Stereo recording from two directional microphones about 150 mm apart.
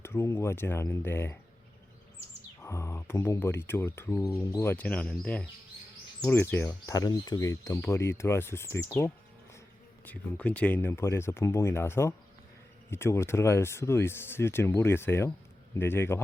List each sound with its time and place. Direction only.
0.0 s speech: 15° left (ahead or behind)
2.6 s speech: 20° left (ahead or behind)
6.9 s speech: 25° left (ahead or behind)